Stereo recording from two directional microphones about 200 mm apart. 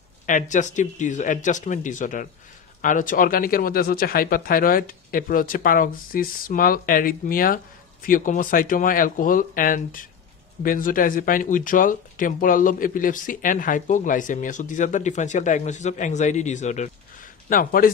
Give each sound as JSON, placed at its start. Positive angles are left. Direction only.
{"t": 0.3, "sound": "speech", "side_deg": 40}